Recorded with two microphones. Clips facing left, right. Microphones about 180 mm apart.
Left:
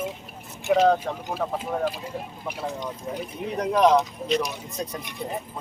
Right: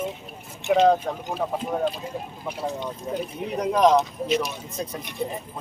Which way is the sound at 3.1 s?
25° right (ahead or behind).